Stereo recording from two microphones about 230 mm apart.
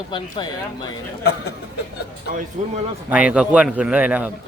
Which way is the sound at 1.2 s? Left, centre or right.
Left.